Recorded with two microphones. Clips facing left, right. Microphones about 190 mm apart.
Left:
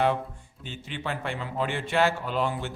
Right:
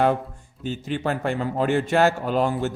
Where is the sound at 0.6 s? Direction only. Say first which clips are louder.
Right 9 dB; 40° right (ahead or behind).